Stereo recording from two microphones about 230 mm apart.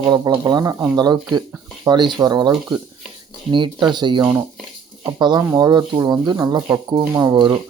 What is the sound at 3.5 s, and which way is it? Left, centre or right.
Speech, centre.